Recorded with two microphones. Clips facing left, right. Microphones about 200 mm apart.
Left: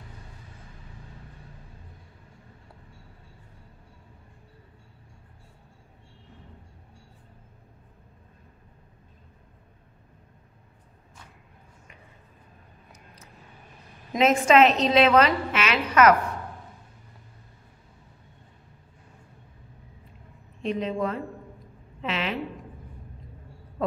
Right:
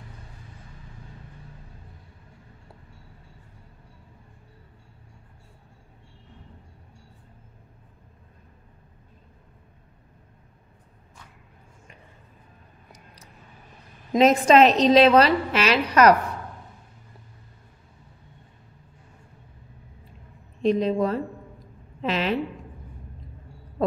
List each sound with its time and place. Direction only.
12.9 s a sound: 35° right (ahead or behind)
14.1 s a woman's voice: 35° right (ahead or behind)
20.6 s a woman's voice: 35° right (ahead or behind)